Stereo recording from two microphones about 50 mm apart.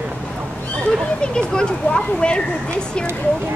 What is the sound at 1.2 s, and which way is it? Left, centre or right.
Speech, centre.